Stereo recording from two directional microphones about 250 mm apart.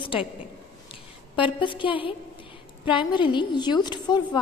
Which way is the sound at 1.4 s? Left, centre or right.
Centre.